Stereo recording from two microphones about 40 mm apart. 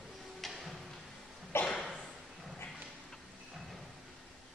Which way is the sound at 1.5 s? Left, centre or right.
Left.